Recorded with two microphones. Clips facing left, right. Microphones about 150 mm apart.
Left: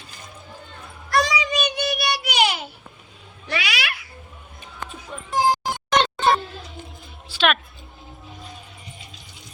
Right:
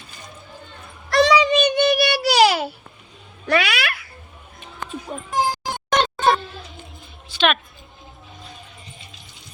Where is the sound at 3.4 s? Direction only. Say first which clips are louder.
Right 7 dB; 55° right (ahead or behind).